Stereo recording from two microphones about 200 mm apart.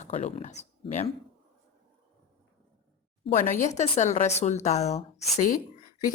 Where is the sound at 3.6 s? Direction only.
35° left (ahead or behind).